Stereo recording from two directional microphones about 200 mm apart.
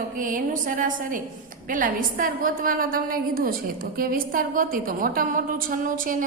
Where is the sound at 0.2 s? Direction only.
40° right (ahead or behind).